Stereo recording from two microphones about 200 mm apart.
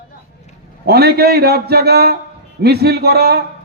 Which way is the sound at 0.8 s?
55° right (ahead or behind).